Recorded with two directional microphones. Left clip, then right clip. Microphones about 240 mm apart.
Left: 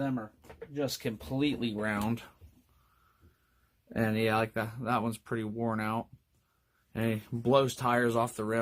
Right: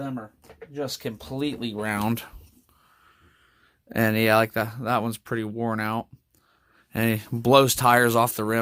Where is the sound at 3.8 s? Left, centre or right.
Right.